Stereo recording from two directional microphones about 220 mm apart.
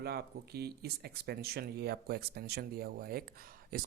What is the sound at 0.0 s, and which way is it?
Speech, 45° right (ahead or behind).